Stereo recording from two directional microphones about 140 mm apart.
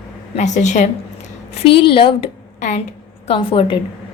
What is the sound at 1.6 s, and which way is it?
A woman's voice, 40° left (ahead or behind).